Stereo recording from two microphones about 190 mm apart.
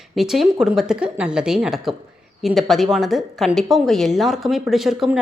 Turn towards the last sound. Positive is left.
turn(degrees=-5)  # may be behind; listen again after turning